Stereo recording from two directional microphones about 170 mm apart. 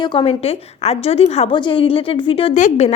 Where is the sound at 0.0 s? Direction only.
30° left (ahead or behind).